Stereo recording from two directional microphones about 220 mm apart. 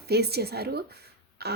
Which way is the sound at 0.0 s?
45° right (ahead or behind).